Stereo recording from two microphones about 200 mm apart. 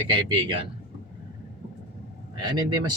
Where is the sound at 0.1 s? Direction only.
25° right (ahead or behind).